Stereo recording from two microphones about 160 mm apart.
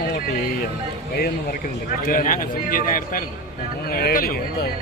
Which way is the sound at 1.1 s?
70° left (ahead or behind).